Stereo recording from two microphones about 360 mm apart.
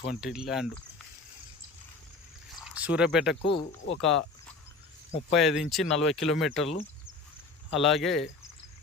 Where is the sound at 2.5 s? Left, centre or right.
Centre.